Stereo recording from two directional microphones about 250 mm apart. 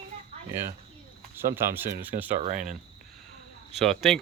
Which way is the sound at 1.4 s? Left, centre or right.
Centre.